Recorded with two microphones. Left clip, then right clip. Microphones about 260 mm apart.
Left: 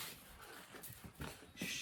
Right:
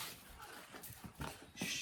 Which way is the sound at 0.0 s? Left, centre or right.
Centre.